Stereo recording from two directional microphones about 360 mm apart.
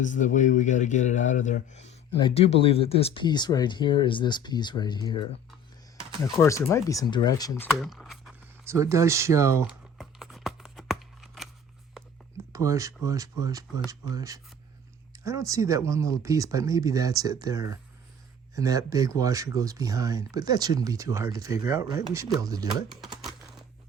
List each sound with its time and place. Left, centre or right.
0.0 s speech: left
6.3 s a sound: centre
12.5 s speech: centre
23.0 s typing: centre